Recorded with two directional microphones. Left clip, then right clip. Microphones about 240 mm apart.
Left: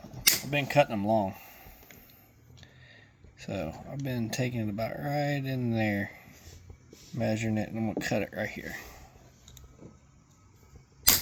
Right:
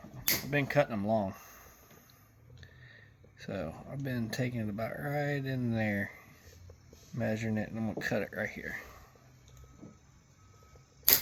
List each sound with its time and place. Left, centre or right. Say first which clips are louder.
0.5 s speech: left 1 dB; left
2.9 s speech: left 1 dB; left